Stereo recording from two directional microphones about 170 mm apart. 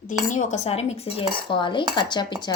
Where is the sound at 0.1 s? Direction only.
50° left (ahead or behind).